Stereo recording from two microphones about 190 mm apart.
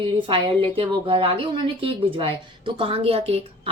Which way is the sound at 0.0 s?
25° right (ahead or behind).